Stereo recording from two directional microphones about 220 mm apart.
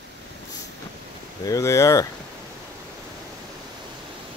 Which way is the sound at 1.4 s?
15° left (ahead or behind).